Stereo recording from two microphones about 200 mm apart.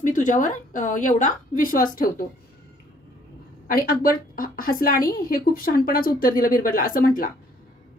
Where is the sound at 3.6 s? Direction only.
45° left (ahead or behind).